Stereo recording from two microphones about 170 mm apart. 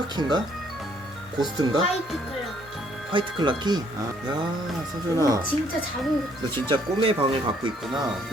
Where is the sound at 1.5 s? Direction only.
25° right (ahead or behind).